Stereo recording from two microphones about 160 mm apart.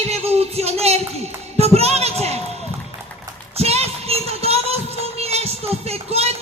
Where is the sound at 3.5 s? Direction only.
40° right (ahead or behind).